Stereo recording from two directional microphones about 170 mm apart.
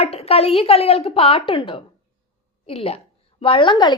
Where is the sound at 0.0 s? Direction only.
35° left (ahead or behind).